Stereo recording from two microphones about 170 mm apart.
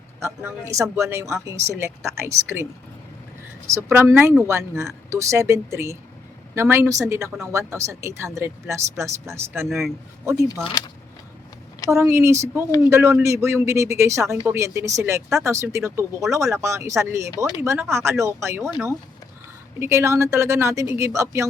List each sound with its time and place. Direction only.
0.2 s speech: 15° right (ahead or behind)
3.7 s speech: 15° right (ahead or behind)
9.6 s a man's voice: centre (ahead or behind)
11.9 s speech: 15° right (ahead or behind)
17.3 s speech: 20° left (ahead or behind)
17.6 s speech: 15° right (ahead or behind)
19.8 s speech: 15° right (ahead or behind)